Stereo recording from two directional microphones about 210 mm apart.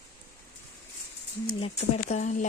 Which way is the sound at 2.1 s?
35° left (ahead or behind).